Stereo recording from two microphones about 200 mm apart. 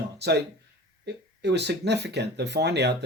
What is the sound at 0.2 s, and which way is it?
Speech, 55° right (ahead or behind).